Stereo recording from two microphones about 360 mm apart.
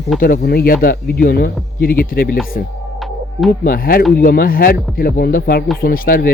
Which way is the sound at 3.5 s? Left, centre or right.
Left.